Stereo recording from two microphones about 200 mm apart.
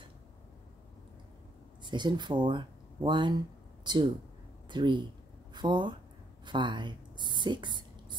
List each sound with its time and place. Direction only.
1.8 s speech: 20° right (ahead or behind)